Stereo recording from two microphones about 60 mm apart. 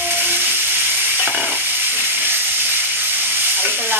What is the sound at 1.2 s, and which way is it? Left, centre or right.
Sizzle, right.